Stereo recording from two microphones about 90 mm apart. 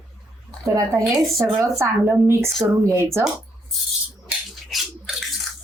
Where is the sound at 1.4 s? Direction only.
25° right (ahead or behind).